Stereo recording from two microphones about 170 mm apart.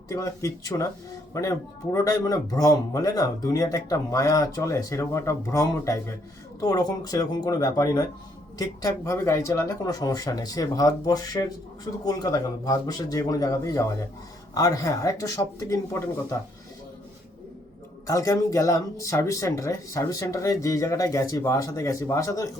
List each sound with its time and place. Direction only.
0.1 s a man's voice: 20° left (ahead or behind)
18.0 s a man's voice: 20° left (ahead or behind)